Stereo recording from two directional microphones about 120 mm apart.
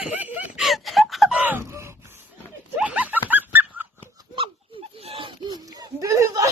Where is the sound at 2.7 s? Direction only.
10° right (ahead or behind).